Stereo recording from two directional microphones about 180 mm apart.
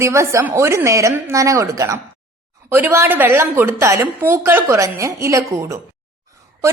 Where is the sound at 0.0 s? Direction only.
15° right (ahead or behind).